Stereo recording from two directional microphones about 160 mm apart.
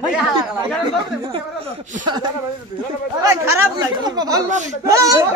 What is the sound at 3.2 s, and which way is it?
Speech, 20° right (ahead or behind).